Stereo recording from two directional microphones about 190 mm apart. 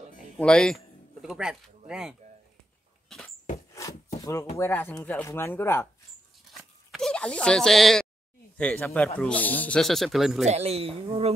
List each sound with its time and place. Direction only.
0.4 s speech: 5° left (ahead or behind)
4.2 s speech: 15° left (ahead or behind)
6.9 s speech: 5° left (ahead or behind)
10.4 s speech: 35° right (ahead or behind)